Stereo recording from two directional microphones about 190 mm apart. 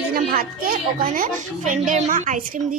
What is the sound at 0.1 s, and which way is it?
A child's voice, 50° right (ahead or behind).